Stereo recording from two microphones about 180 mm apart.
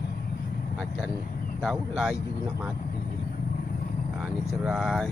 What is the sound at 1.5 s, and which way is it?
Speech, 5° right (ahead or behind).